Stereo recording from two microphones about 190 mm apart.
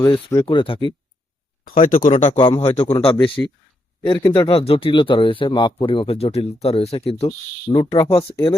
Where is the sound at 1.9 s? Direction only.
45° left (ahead or behind).